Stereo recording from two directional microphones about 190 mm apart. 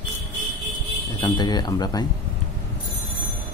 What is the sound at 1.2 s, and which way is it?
Speech, 20° left (ahead or behind).